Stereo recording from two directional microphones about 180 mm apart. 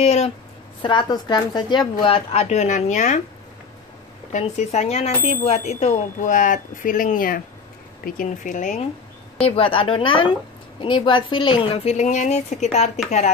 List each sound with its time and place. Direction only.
0.0 s speech: 35° left (ahead or behind)
0.8 s speech: 25° left (ahead or behind); by 3.2 s 40° left (ahead or behind)
4.3 s speech: 40° left (ahead or behind)
9.4 s speech: 30° left (ahead or behind)